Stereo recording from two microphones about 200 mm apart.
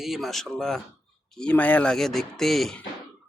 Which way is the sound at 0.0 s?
Centre (ahead or behind).